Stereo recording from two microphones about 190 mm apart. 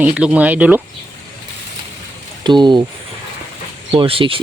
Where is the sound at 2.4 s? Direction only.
25° right (ahead or behind).